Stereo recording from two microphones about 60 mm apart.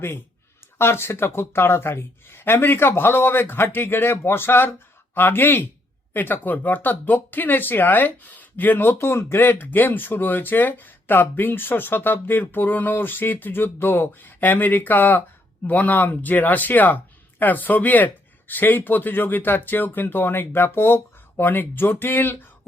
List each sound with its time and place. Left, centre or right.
0.8 s speech: left
9.0 s speech: left